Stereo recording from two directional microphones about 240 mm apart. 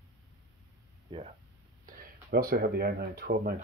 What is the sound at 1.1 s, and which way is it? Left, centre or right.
Speech, right.